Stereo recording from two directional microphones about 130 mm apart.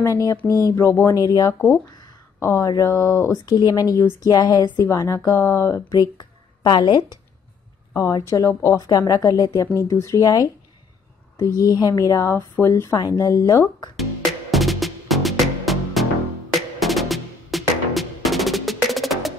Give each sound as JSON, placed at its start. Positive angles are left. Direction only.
{"t": 0.0, "sound": "speech", "side_deg": 25}
{"t": 12.9, "sound": "speech", "side_deg": 30}
{"t": 13.9, "sound": "music", "side_deg": 0}